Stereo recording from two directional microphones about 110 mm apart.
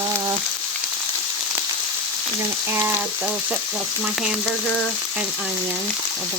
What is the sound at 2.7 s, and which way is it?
Frying, 20° right (ahead or behind).